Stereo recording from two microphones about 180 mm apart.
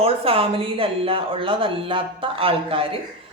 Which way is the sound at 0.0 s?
30° right (ahead or behind).